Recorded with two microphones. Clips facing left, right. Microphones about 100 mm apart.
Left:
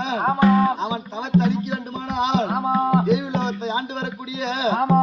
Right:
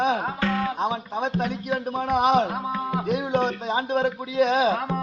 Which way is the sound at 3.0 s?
55° right (ahead or behind).